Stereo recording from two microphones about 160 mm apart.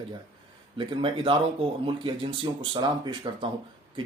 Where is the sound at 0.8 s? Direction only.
30° right (ahead or behind).